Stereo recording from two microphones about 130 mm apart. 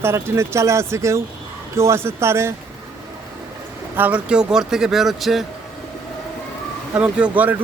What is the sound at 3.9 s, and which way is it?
Speech, 10° right (ahead or behind).